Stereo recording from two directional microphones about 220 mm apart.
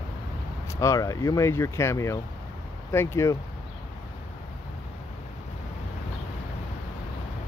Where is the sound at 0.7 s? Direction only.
15° left (ahead or behind).